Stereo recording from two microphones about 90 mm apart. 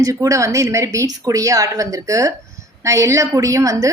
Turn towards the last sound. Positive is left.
turn(degrees=-40)  # may be behind; listen again after turning